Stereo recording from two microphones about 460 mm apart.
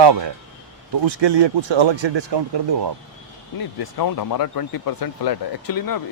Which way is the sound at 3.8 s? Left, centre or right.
Left.